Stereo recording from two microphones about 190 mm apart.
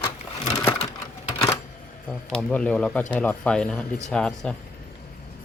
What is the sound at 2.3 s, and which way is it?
Speech, 5° left (ahead or behind).